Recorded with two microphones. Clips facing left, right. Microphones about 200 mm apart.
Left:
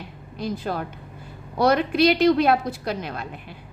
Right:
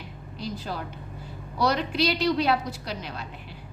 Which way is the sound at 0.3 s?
55° left (ahead or behind).